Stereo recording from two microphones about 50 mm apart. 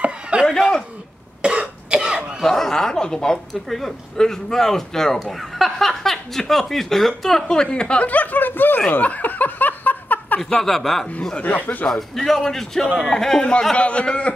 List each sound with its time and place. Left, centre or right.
0.0 s a sound: right
0.5 s a sound: centre
1.4 s cough: right
2.4 s speech: centre
8.1 s speech: left
9.0 s snicker: left
10.6 s speech: centre
11.3 s speech: left
11.9 s speech: centre
13.7 s a man's voice: left